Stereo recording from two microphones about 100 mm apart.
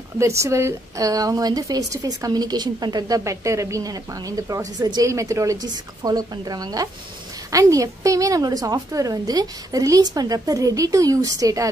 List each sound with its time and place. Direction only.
0.2 s a woman's voice: 30° right (ahead or behind)